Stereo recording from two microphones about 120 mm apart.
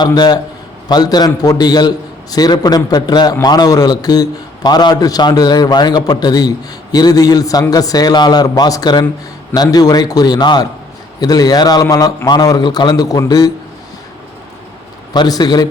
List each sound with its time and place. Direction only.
0.0 s a man's voice: 35° left (ahead or behind)
15.1 s a man's voice: 35° left (ahead or behind)